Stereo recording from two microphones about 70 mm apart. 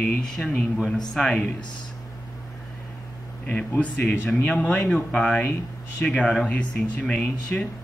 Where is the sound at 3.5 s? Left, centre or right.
Centre.